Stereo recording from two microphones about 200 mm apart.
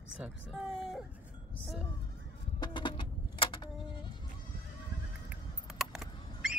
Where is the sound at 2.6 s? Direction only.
25° left (ahead or behind).